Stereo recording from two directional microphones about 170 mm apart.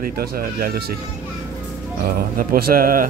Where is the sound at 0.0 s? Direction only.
60° right (ahead or behind).